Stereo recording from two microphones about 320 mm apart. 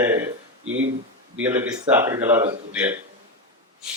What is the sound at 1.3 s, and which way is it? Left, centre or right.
A man's voice, centre.